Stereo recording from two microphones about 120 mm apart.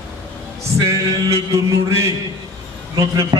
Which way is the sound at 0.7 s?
25° right (ahead or behind).